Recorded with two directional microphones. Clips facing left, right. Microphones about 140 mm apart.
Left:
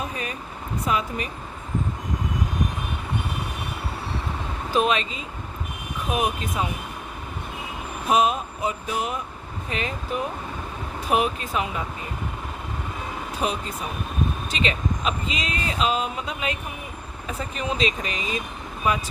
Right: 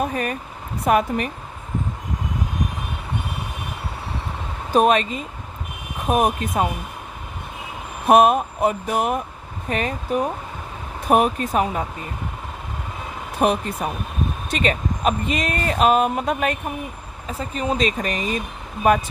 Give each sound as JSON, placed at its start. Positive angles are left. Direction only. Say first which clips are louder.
{"t": 0.0, "sound": "speech", "louder": "right 7 dB", "side_deg": -50}
{"t": 4.7, "sound": "speech", "louder": "right 6 dB", "side_deg": -50}
{"t": 8.0, "sound": "speech", "louder": "right 7 dB", "side_deg": -55}
{"t": 13.4, "sound": "speech", "louder": "right 8 dB", "side_deg": -55}
{"t": 17.2, "sound": "speech", "louder": "right 4 dB", "side_deg": -35}